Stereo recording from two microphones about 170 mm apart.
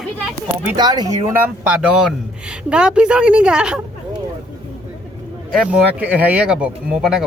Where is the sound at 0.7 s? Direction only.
25° right (ahead or behind).